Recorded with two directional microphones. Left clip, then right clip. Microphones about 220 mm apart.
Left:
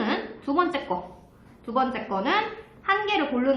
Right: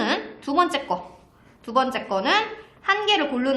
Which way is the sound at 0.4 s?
40° right (ahead or behind).